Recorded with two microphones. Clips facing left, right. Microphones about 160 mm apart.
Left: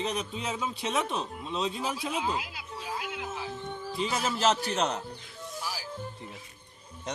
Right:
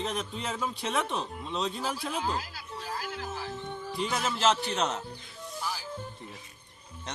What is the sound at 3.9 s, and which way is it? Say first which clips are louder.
Speech: left 1 dB; 5° left (ahead or behind).